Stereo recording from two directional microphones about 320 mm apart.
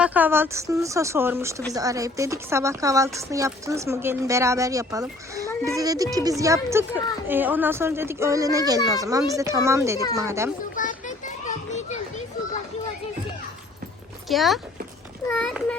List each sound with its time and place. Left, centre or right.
0.0 s speech: centre
10.6 s children playing: left
14.3 s a child's voice: centre